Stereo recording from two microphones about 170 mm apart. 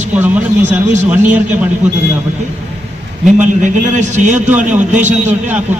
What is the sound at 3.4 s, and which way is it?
A man's voice, 45° right (ahead or behind).